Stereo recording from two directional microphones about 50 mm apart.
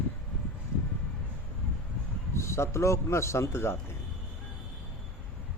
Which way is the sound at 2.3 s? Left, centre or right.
Left.